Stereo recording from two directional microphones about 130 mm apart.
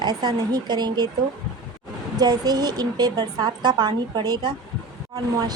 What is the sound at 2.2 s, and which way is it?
Speech, 30° right (ahead or behind).